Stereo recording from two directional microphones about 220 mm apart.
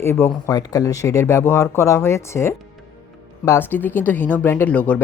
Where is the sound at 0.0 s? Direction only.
10° left (ahead or behind).